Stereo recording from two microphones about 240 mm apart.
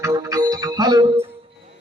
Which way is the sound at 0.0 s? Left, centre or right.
Centre.